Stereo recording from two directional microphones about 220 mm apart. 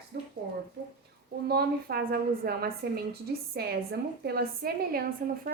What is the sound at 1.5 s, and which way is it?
A woman's voice, 45° right (ahead or behind).